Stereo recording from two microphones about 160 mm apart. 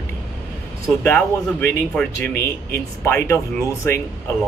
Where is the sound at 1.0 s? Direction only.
10° left (ahead or behind).